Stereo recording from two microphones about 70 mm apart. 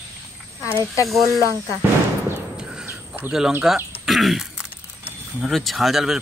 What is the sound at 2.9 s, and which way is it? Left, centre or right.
Bird, right.